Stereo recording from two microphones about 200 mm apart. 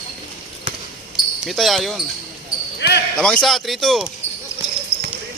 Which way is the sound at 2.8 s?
60° left (ahead or behind).